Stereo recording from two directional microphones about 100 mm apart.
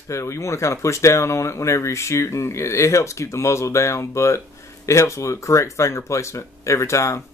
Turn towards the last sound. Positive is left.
turn(degrees=30)  # may be behind; listen again after turning